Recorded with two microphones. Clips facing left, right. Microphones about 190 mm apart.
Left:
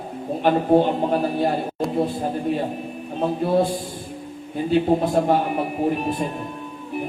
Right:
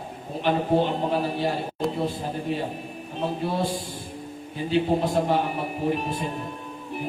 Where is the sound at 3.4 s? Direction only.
55° left (ahead or behind).